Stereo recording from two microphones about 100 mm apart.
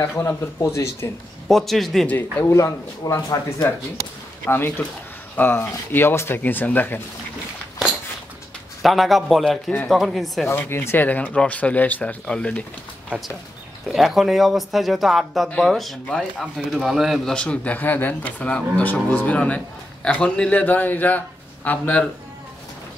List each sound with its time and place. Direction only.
0.0 s speech: 25° left (ahead or behind)
1.5 s speech: centre (ahead or behind)
2.5 s speech: 35° left (ahead or behind)
4.5 s speech: 20° left (ahead or behind)
8.8 s speech: centre (ahead or behind)
10.5 s speech: 25° left (ahead or behind)
13.8 s speech: centre (ahead or behind)
17.3 s speech: 10° left (ahead or behind)